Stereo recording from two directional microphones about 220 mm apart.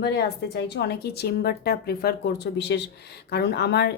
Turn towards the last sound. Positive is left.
turn(degrees=50)  # may be behind; listen again after turning